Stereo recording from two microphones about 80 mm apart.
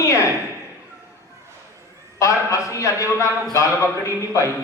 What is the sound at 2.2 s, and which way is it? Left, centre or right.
A man's voice, left.